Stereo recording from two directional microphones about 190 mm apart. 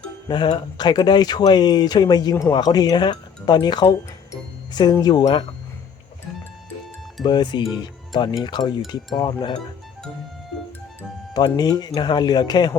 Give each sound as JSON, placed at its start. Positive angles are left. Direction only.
{"t": 0.3, "sound": "speech", "side_deg": 25}
{"t": 7.3, "sound": "speech", "side_deg": 20}
{"t": 11.3, "sound": "speech", "side_deg": 20}